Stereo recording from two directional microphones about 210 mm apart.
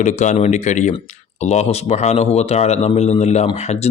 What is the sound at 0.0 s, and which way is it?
Speech, 35° left (ahead or behind).